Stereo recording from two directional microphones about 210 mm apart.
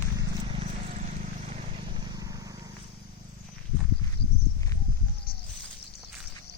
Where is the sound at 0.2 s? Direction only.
25° right (ahead or behind).